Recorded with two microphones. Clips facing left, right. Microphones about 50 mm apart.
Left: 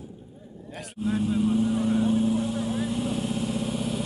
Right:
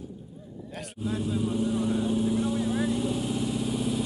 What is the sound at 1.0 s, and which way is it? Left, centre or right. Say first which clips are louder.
Speech: left 4 dB; left.